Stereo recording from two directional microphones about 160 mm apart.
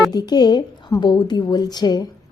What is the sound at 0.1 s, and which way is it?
A woman's voice, 25° left (ahead or behind).